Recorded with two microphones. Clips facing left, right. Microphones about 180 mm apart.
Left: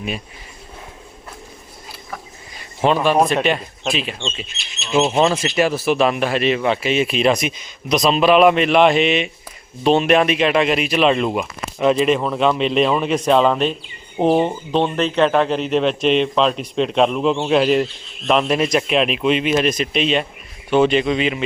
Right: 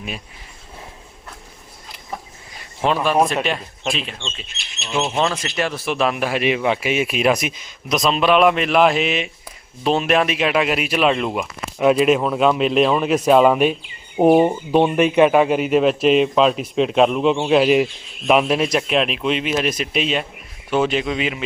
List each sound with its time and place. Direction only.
2.6 s a man's voice: centre (ahead or behind)
4.2 s speech: 20° left (ahead or behind)
4.4 s speech: 55° right (ahead or behind)
5.1 s speech: 5° left (ahead or behind)